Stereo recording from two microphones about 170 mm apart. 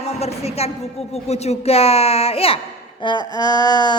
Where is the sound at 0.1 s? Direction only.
40° left (ahead or behind).